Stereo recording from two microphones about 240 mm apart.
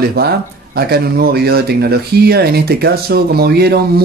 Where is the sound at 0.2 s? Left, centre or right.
Right.